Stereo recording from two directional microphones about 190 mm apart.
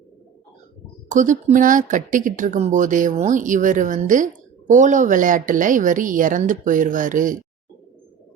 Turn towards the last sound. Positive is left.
turn(degrees=-45)  # may be behind; listen again after turning